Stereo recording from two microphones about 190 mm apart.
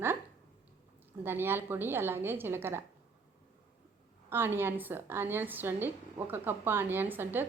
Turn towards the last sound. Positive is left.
turn(degrees=-10)  # may be behind; listen again after turning